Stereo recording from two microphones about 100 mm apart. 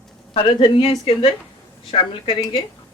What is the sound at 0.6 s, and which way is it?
A woman's voice, 60° left (ahead or behind).